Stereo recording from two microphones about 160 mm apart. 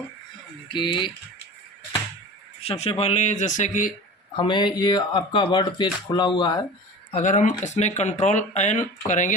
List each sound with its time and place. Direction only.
0.7 s speech: 30° left (ahead or behind)
2.6 s speech: 40° left (ahead or behind)
4.4 s speech: 30° left (ahead or behind)
7.1 s speech: 50° left (ahead or behind)